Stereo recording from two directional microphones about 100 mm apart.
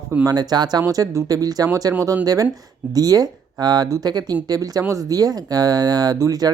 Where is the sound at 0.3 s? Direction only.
45° right (ahead or behind).